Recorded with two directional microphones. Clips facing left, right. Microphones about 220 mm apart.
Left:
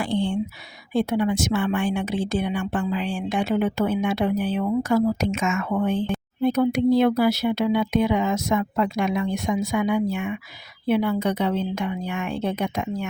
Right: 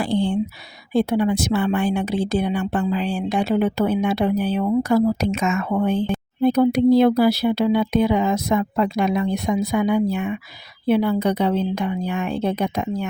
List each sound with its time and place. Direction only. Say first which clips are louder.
0.0 s a woman's voice: right 3 dB; 35° right (ahead or behind)